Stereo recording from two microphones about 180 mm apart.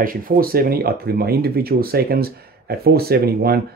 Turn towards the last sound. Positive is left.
turn(degrees=-60)  # may be behind; listen again after turning